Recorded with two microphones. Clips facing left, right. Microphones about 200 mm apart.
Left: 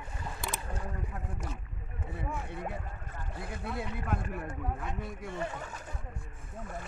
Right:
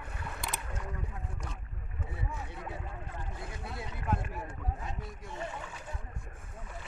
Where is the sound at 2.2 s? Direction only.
55° left (ahead or behind).